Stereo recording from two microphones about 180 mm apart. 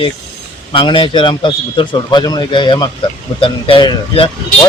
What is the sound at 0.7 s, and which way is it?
A man's voice, 25° left (ahead or behind).